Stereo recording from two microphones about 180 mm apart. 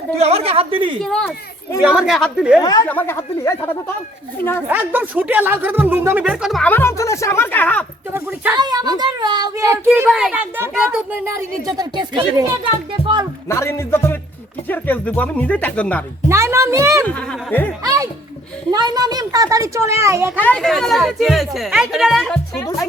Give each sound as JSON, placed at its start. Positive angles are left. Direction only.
{"t": 0.2, "sound": "a woman's voice", "side_deg": -35}
{"t": 1.0, "sound": "speech", "side_deg": 5}
{"t": 2.6, "sound": "speech", "side_deg": 20}
{"t": 4.7, "sound": "speech", "side_deg": -10}
{"t": 6.7, "sound": "speech", "side_deg": 15}
{"t": 8.1, "sound": "a child's voice", "side_deg": -15}
{"t": 10.1, "sound": "a child's voice", "side_deg": -5}
{"t": 13.5, "sound": "speech", "side_deg": 15}
{"t": 16.3, "sound": "speech", "side_deg": -15}
{"t": 17.1, "sound": "speech", "side_deg": 5}
{"t": 17.8, "sound": "speech", "side_deg": -20}
{"t": 20.4, "sound": "speech", "side_deg": 5}